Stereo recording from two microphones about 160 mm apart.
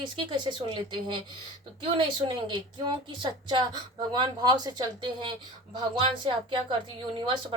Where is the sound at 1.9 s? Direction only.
30° right (ahead or behind).